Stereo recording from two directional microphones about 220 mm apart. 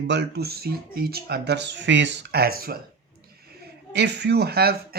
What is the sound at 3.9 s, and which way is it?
Speech, 50° right (ahead or behind).